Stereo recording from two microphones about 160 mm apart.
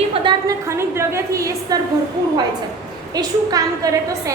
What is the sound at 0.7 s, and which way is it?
A woman's voice, 15° right (ahead or behind).